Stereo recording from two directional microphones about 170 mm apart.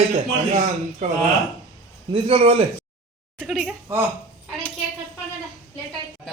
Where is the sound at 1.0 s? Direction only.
45° right (ahead or behind).